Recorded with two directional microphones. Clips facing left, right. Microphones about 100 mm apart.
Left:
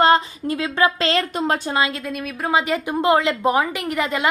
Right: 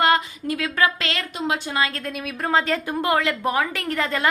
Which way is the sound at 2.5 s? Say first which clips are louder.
Left 1 dB; 15° left (ahead or behind).